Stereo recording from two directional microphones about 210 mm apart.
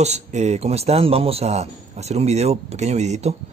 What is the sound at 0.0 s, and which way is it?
Speech, 30° right (ahead or behind).